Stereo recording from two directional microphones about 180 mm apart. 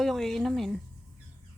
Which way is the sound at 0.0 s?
Centre (ahead or behind).